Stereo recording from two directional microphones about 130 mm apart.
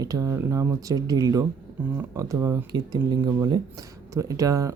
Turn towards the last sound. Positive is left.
turn(degrees=-25)  # may be behind; listen again after turning